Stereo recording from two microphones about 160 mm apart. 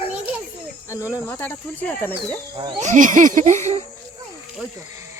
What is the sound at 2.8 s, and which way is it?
Speech, 50° right (ahead or behind).